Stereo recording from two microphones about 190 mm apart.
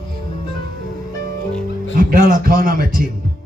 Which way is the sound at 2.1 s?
50° right (ahead or behind).